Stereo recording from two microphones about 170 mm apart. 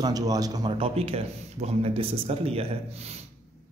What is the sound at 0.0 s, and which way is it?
Speech, 20° right (ahead or behind).